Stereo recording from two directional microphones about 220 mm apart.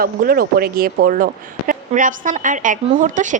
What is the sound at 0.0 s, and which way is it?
Speech, 40° right (ahead or behind).